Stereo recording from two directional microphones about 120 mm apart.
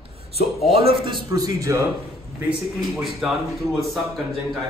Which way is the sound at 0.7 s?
55° right (ahead or behind).